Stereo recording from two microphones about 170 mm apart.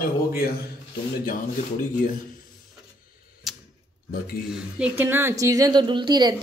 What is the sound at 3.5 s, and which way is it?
Tick-tock, centre (ahead or behind).